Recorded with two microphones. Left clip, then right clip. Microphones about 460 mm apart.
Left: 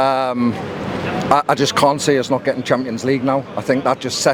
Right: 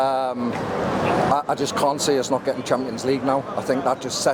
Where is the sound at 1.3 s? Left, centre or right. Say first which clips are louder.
Left 7 dB; left.